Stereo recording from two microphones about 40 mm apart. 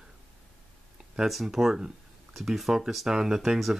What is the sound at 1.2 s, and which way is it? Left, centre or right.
Speech, centre.